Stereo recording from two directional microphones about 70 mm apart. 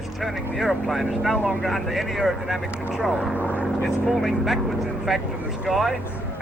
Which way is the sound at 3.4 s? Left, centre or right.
Left.